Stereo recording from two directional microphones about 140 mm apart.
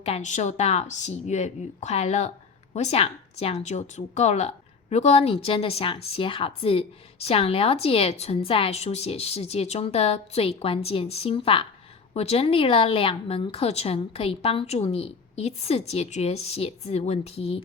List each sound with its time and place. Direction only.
0.0 s a woman's voice: 50° left (ahead or behind)